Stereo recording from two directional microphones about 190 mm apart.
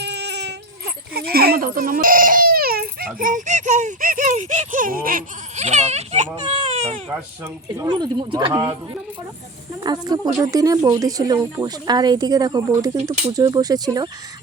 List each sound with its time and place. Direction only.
0.0 s a sound: 60° right (ahead or behind); by 7.0 s 35° right (ahead or behind)
7.1 s speech: 15° right (ahead or behind)
9.8 s speech: 20° right (ahead or behind)